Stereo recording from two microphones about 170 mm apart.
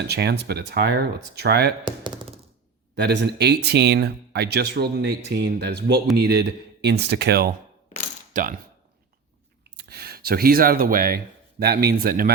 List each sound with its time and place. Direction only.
0.0 s speech: 75° right (ahead or behind)
1.8 s thunk: 30° right (ahead or behind)
2.9 s speech: 80° right
8.3 s mechanisms: 55° right (ahead or behind)
9.6 s speech: 70° right (ahead or behind)